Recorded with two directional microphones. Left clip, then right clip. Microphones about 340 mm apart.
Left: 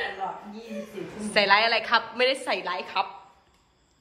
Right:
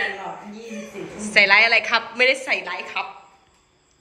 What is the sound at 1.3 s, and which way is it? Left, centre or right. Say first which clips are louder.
A woman's voice: right 6 dB; centre.